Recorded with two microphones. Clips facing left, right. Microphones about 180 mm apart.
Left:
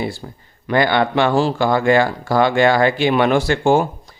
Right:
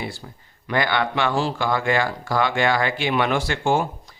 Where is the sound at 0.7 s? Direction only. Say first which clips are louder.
Left 6 dB; 30° left (ahead or behind).